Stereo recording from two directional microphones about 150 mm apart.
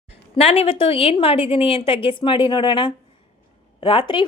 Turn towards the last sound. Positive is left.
turn(degrees=35)  # may be behind; listen again after turning